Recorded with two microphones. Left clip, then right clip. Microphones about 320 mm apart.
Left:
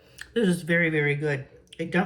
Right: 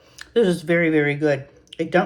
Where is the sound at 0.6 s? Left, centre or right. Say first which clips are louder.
Right 5 dB; centre.